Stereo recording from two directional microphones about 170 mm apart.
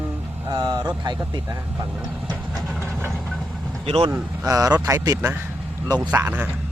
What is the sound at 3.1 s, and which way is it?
Vehicle, 5° left (ahead or behind).